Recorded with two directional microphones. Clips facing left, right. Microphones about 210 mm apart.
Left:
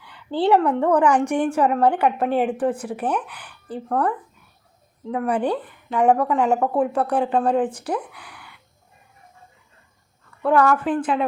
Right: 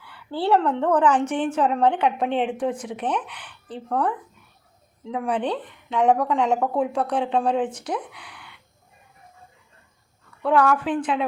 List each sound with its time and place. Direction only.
0.0 s a woman's voice: 20° left (ahead or behind)
10.4 s speech: centre (ahead or behind)